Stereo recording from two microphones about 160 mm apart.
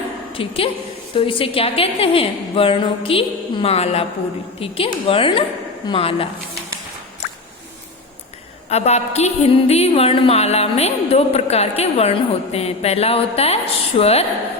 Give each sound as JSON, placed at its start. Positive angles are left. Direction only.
{"t": 0.3, "sound": "a woman's voice", "side_deg": 35}
{"t": 8.7, "sound": "a woman's voice", "side_deg": 45}